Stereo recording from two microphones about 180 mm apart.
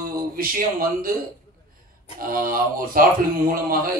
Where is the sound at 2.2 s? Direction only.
55° right (ahead or behind).